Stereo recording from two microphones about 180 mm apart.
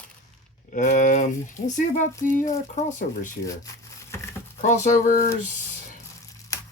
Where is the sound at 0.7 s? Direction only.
45° left (ahead or behind).